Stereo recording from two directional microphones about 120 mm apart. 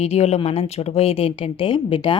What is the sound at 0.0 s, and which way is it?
Speech, 65° left (ahead or behind).